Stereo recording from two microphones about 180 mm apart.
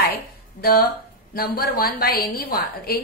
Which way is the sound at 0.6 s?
55° left (ahead or behind).